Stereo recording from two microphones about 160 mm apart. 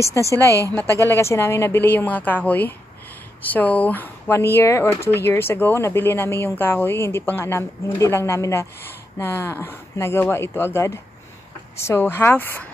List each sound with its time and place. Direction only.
0.1 s a woman's voice: 20° left (ahead or behind)
0.5 s a woman's voice: 20° right (ahead or behind)
1.0 s a woman's voice: 15° left (ahead or behind)